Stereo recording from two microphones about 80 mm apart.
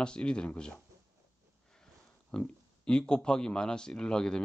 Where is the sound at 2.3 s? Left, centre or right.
Centre.